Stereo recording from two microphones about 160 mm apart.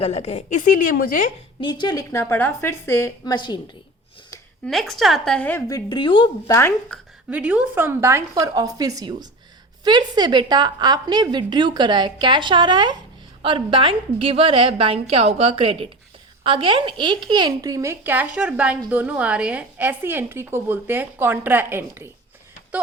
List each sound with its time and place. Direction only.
0.0 s a woman's voice: 40° left (ahead or behind); by 1.3 s 60° left (ahead or behind)
1.6 s a woman's voice: 30° left (ahead or behind)
3.3 s a woman's voice: 30° left (ahead or behind)
4.6 s a woman's voice: centre (ahead or behind); by 6.3 s 30° left (ahead or behind)
6.5 s a woman's voice: 15° left (ahead or behind)
7.3 s a woman's voice: 10° right (ahead or behind)